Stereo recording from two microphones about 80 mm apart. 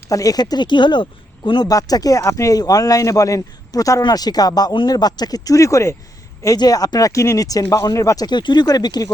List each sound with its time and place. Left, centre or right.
0.1 s speech: left
1.6 s speech: left
4.9 s speech: left
6.6 s speech: left
8.6 s speech: left